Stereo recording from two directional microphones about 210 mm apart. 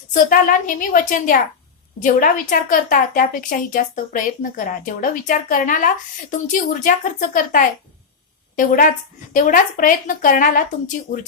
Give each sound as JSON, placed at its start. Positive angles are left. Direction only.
{"t": 0.1, "sound": "a woman's voice", "side_deg": 40}